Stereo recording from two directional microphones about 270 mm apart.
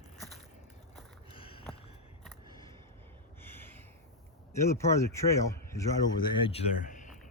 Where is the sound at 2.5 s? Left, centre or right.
Centre.